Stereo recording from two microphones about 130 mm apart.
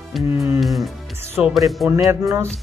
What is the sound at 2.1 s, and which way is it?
Speech, 20° right (ahead or behind).